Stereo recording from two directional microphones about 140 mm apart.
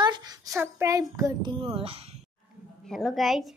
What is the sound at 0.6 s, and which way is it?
A child's voice, 20° right (ahead or behind).